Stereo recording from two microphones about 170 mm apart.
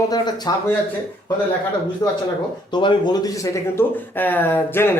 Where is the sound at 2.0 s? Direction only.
25° left (ahead or behind).